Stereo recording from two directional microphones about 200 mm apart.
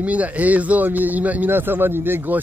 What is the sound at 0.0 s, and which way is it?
Speech, 5° right (ahead or behind).